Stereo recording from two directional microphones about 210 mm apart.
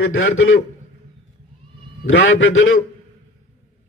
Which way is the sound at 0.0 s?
70° left (ahead or behind).